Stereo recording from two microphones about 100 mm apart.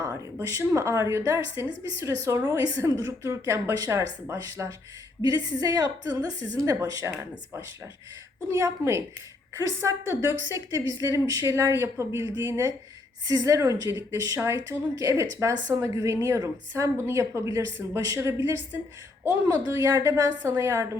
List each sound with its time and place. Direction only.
0.4 s a woman's voice: 30° right (ahead or behind)
5.2 s a woman's voice: 40° right (ahead or behind)
8.5 s a woman's voice: 25° right (ahead or behind)
13.2 s a woman's voice: 35° right (ahead or behind)